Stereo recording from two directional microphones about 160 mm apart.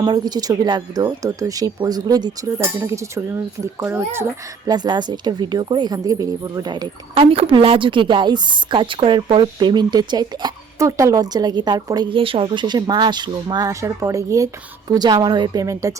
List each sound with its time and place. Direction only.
0.0 s a woman's voice: 25° right (ahead or behind)
2.6 s speech: 15° right (ahead or behind)
4.7 s a woman's voice: 25° right (ahead or behind)